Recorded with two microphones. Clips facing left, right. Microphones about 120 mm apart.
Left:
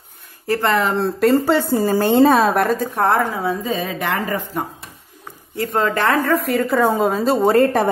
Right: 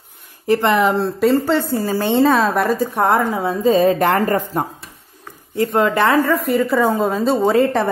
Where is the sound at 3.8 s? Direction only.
40° right (ahead or behind).